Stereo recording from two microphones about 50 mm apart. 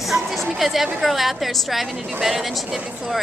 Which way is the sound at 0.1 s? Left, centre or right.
Centre.